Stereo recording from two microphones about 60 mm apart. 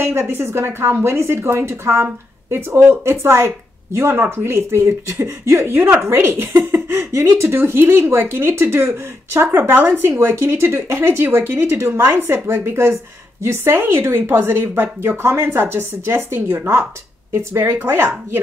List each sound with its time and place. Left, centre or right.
0.0 s speech: right
9.5 s a woman's voice: right
10.1 s a woman's voice: right